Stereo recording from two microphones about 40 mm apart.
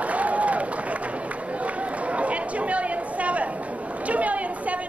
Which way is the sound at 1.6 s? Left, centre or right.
Right.